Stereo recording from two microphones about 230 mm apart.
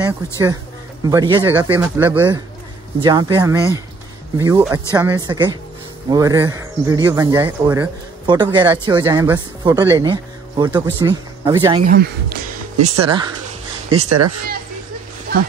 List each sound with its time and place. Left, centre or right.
0.0 s a man's voice: centre
11.9 s speech: right
13.0 s speech: right
13.8 s speech: right